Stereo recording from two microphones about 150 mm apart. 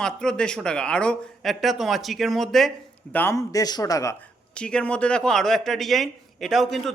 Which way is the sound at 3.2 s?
20° left (ahead or behind).